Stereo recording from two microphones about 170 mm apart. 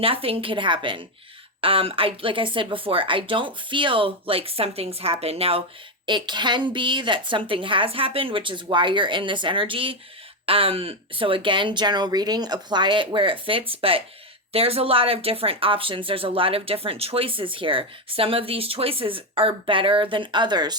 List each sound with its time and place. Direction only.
0.0 s a woman's voice: 35° right (ahead or behind)